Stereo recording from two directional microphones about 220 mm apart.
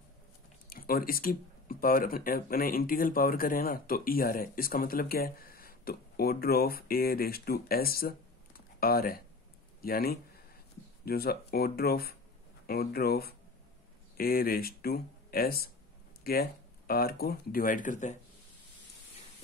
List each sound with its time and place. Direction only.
0.7 s speech: 40° left (ahead or behind)
8.5 s a sound: 45° left (ahead or behind)
9.8 s speech: 45° left (ahead or behind)